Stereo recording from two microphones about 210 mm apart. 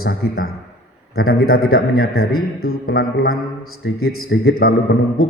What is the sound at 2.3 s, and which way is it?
Speech, 85° left.